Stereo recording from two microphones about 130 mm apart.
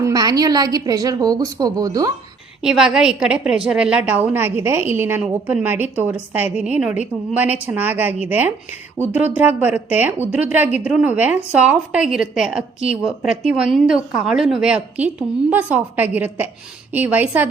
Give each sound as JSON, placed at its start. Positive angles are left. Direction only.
{"t": 0.0, "sound": "a woman's voice", "side_deg": -30}
{"t": 2.6, "sound": "a woman's voice", "side_deg": -5}